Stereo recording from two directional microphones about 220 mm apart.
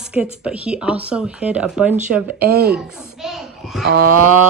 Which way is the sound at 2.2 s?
45° right (ahead or behind).